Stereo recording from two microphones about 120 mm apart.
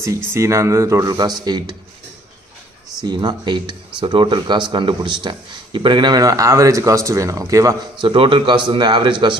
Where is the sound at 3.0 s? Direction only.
35° right (ahead or behind).